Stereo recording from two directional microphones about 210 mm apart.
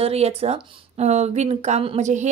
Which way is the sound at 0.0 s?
30° right (ahead or behind).